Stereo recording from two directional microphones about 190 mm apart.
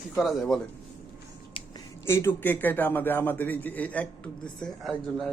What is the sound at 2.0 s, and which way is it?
A man's voice, 15° left (ahead or behind).